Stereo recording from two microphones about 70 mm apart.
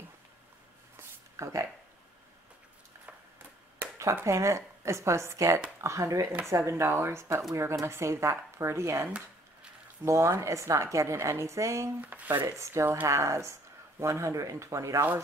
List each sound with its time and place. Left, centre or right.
0.9 s a sound: right
4.0 s speech: right
12.0 s speech: right
12.4 s speech: right